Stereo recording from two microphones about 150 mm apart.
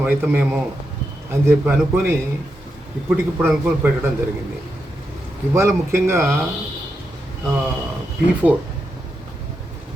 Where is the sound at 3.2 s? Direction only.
15° right (ahead or behind).